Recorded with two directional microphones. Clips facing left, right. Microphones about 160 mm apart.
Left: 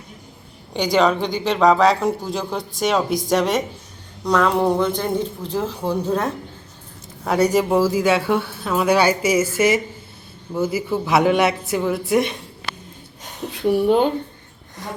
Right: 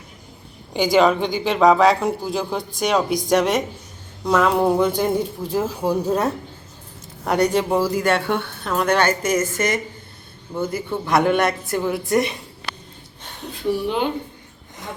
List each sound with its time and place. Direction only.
0.7 s speech: centre (ahead or behind)
7.3 s speech: 5° left (ahead or behind)
13.8 s speech: 40° left (ahead or behind)